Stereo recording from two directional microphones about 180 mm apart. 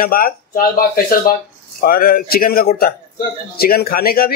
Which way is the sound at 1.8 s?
55° left (ahead or behind).